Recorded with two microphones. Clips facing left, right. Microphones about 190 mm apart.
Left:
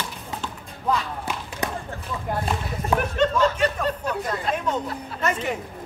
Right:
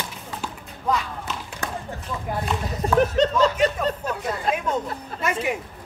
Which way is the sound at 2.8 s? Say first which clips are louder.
Right 3 dB; 35° right (ahead or behind).